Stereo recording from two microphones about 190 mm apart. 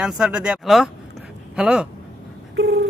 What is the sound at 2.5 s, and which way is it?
Dog, 65° right (ahead or behind).